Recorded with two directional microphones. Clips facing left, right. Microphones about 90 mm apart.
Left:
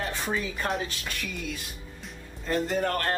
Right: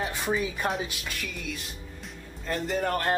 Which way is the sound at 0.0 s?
10° right (ahead or behind).